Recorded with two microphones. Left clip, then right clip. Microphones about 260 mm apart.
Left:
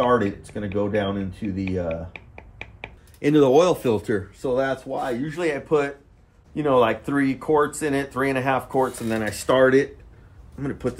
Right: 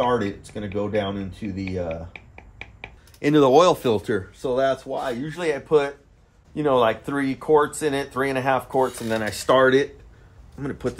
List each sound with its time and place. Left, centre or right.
0.0 s speech: centre
3.2 s speech: right